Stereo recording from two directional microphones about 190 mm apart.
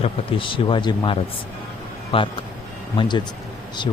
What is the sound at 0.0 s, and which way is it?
Speech, 25° left (ahead or behind).